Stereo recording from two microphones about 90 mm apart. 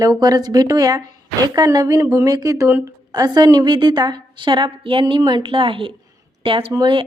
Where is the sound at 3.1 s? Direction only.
50° right (ahead or behind); by 5.2 s 70° right (ahead or behind).